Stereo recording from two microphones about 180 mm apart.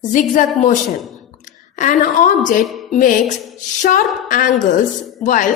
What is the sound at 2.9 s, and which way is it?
Speech, 45° left (ahead or behind).